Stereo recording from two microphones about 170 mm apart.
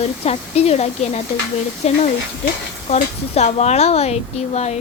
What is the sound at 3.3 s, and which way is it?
A child's voice, 40° left (ahead or behind).